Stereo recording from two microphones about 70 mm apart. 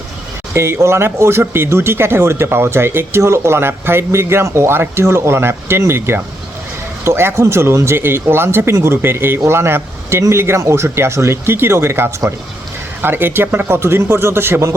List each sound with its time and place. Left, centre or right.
0.5 s speech: right